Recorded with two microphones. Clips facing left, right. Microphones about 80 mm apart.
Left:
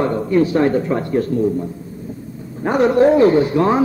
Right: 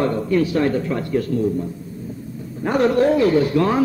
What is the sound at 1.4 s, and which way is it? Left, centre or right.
A man's voice, centre.